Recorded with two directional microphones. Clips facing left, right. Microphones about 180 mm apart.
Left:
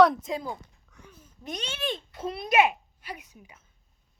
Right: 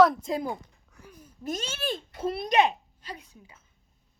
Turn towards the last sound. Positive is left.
turn(degrees=15)  # may be behind; listen again after turning